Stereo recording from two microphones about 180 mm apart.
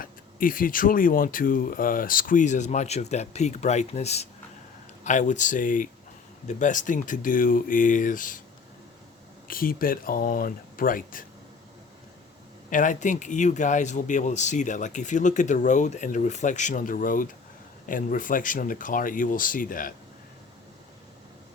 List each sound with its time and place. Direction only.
0.0 s speech: 50° left (ahead or behind)
9.5 s speech: 50° left (ahead or behind)
12.7 s speech: 45° left (ahead or behind)